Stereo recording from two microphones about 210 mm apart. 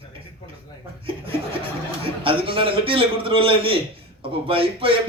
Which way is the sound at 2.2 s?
25° right (ahead or behind).